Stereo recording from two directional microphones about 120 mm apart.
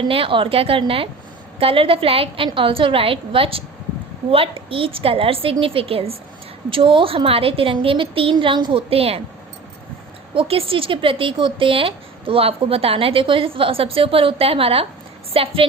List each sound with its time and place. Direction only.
0.0 s speech: 45° right (ahead or behind)
8.9 s speech: 55° right (ahead or behind)
10.3 s speech: 50° right (ahead or behind)